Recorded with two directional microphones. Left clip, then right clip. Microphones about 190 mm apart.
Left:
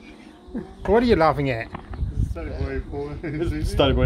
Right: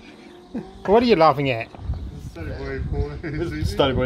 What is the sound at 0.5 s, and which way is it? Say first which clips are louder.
Speech: right 2 dB; 15° right (ahead or behind).